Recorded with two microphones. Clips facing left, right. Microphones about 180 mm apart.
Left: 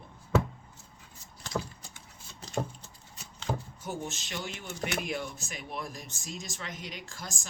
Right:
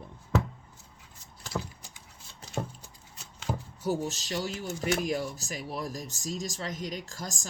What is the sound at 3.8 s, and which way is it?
Speech, 35° right (ahead or behind).